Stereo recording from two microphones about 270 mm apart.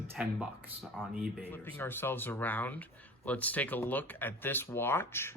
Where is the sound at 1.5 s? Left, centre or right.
Centre.